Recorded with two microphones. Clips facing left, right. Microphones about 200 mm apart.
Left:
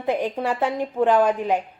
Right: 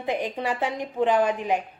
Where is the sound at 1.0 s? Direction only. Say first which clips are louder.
Left 3 dB; 15° right (ahead or behind).